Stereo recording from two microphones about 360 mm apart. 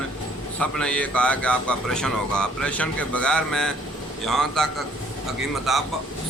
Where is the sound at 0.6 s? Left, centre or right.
Centre.